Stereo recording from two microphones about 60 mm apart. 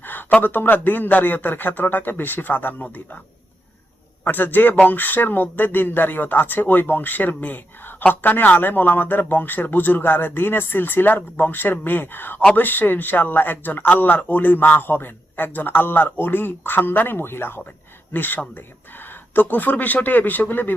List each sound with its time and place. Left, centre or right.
0.0 s a sound: left
0.3 s speech: left
4.2 s speech: left